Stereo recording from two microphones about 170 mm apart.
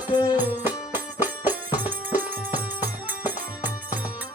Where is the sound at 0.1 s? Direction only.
25° left (ahead or behind).